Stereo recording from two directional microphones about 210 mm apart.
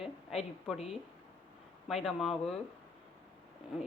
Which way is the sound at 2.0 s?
Centre (ahead or behind).